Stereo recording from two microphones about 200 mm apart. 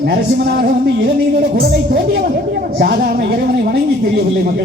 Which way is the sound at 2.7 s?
55° right (ahead or behind).